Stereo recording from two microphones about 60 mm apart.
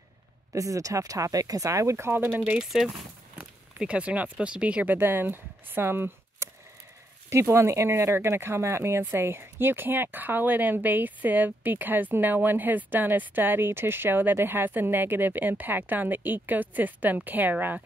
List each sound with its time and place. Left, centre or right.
0.5 s speech: right
2.1 s speech: right
2.6 s speech: centre
3.3 s speech: centre
4.9 s speech: right
6.4 s a sound: right
7.2 s speech: right